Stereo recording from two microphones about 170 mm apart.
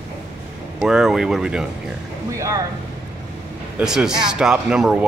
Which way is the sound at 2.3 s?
20° right (ahead or behind).